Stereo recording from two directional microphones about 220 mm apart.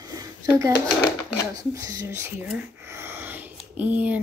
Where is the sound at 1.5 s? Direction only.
15° right (ahead or behind).